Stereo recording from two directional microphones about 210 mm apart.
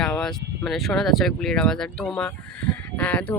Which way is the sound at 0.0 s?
5° left (ahead or behind).